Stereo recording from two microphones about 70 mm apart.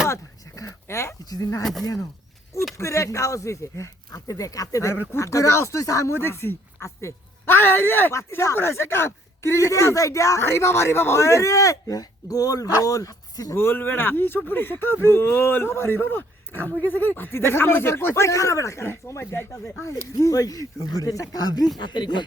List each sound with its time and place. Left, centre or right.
0.1 s a sound: left
1.2 s speech: left
2.7 s speech: left
4.1 s speech: left
6.1 s a man's voice: left
8.1 s speech: left
13.5 s speech: left
21.8 s speech: left